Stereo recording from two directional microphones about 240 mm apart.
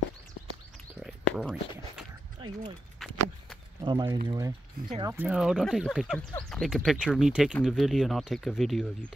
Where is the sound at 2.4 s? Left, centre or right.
Centre.